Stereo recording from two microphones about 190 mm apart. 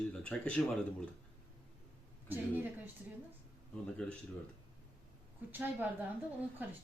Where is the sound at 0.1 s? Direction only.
5° left (ahead or behind).